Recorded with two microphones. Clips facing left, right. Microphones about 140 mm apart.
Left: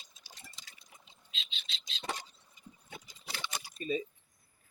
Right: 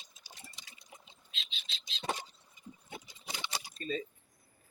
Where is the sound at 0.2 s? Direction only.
15° right (ahead or behind).